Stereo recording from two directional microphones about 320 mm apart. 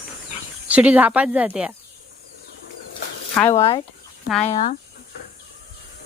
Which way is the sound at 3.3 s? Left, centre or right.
Centre.